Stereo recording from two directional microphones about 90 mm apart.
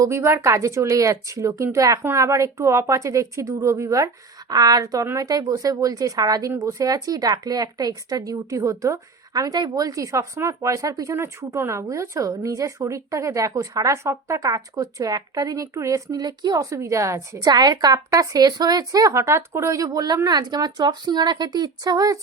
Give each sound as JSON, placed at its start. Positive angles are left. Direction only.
{"t": 0.0, "sound": "speech", "side_deg": -30}
{"t": 17.4, "sound": "speech", "side_deg": -50}